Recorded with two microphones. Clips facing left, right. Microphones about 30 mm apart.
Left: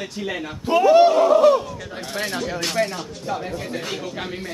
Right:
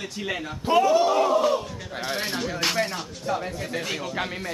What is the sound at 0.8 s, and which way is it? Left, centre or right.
Speech, left.